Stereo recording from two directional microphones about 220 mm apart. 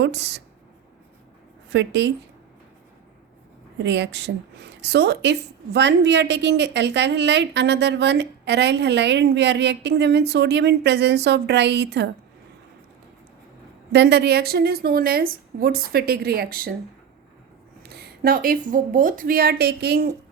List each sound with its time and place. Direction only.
0.0 s a woman's voice: 50° right (ahead or behind)
1.7 s a woman's voice: 50° right (ahead or behind)
3.8 s a woman's voice: 55° right (ahead or behind)
13.9 s a woman's voice: 50° right (ahead or behind)
17.8 s a woman's voice: 45° right (ahead or behind)